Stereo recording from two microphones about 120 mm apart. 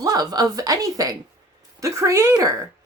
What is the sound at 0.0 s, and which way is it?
A woman's voice, 30° right (ahead or behind).